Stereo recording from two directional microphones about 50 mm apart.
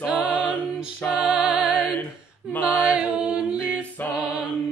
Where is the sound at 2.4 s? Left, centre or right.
Left.